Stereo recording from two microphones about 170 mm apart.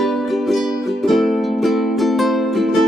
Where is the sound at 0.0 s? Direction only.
Centre (ahead or behind).